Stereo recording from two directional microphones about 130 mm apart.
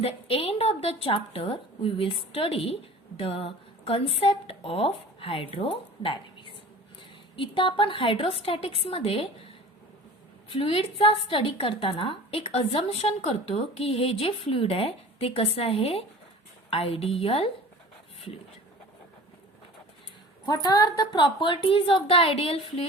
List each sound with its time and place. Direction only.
0.0 s a woman's voice: 50° left (ahead or behind)
10.5 s a woman's voice: 45° left (ahead or behind)
20.4 s a woman's voice: 35° left (ahead or behind)